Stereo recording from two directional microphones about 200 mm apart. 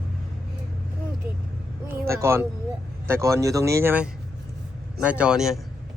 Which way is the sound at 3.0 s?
15° right (ahead or behind).